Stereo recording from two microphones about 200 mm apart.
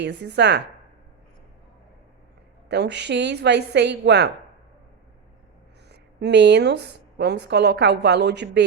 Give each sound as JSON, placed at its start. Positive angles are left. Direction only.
{"t": 0.0, "sound": "a woman's voice", "side_deg": -60}
{"t": 2.6, "sound": "a woman's voice", "side_deg": -60}
{"t": 5.9, "sound": "a woman's voice", "side_deg": -60}